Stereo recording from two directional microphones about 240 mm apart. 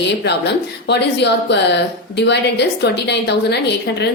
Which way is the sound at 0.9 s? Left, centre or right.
Left.